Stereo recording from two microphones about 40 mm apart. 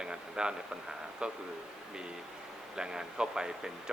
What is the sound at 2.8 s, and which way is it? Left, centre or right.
Speech, centre.